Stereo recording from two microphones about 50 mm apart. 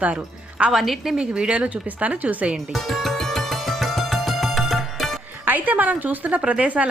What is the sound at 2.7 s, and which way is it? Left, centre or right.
Music, centre.